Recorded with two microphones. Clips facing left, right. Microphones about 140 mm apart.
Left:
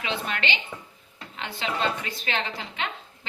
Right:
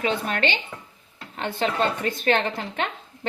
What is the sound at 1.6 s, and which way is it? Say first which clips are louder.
Speech: right 4 dB; 50° right (ahead or behind).